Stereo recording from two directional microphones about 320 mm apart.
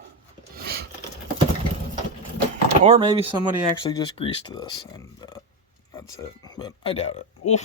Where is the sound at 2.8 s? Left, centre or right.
Centre.